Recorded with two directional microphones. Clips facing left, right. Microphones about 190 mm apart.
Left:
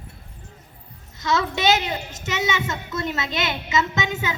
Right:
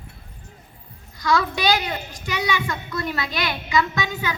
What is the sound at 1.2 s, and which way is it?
A woman's voice, 25° left (ahead or behind).